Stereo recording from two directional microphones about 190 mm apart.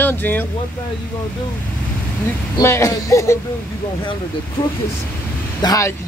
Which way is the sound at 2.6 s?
15° left (ahead or behind).